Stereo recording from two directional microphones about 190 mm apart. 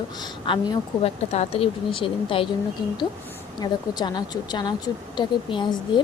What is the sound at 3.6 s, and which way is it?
A woman's voice, 20° left (ahead or behind).